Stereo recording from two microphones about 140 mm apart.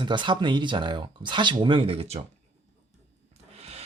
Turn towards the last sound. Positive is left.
turn(degrees=-45)  # may be behind; listen again after turning